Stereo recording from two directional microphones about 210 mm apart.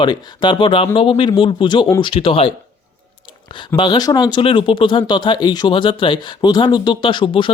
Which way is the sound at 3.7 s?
20° left (ahead or behind).